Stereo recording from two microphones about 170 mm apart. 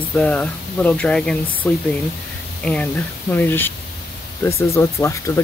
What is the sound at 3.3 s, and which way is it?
Speech, 10° left (ahead or behind).